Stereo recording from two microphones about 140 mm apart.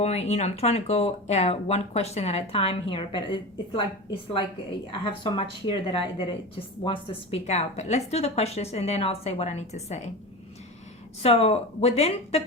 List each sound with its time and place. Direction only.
0.0 s speech: 50° left (ahead or behind)
5.0 s speech: 35° left (ahead or behind); by 10.0 s 50° left (ahead or behind)
11.2 s speech: 45° left (ahead or behind)